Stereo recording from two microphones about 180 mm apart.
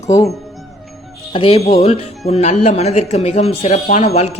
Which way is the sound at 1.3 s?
30° left (ahead or behind).